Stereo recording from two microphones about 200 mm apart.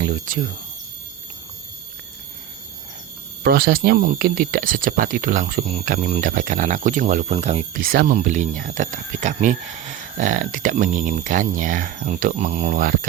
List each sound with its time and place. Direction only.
0.0 s speech: 45° right (ahead or behind)
3.4 s speech: 50° right (ahead or behind)